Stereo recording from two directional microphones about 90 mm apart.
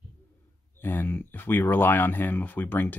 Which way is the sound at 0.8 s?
25° left (ahead or behind).